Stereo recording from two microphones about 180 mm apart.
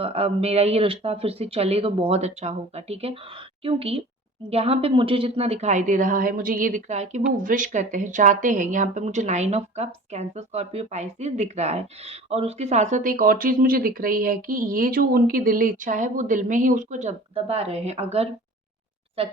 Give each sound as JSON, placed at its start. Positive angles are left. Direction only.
{"t": 0.0, "sound": "speech", "side_deg": -35}